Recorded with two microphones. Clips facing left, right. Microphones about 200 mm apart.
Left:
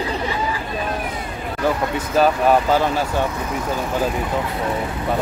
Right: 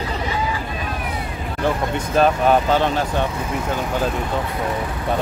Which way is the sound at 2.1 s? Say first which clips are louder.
Even; 5° left (ahead or behind).